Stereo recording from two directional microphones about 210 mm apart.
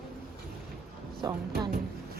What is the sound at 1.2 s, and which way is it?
Speech, 15° right (ahead or behind).